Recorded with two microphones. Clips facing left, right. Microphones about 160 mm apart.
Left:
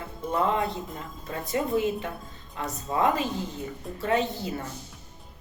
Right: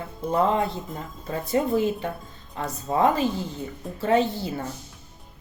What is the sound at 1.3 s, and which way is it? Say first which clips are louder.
Speech: right 4 dB; 30° right (ahead or behind).